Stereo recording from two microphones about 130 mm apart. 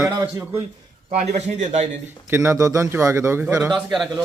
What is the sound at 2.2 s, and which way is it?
A man's voice, 20° right (ahead or behind).